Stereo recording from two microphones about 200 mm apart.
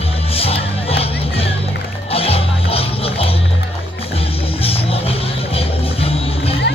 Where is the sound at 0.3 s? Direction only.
30° left (ahead or behind).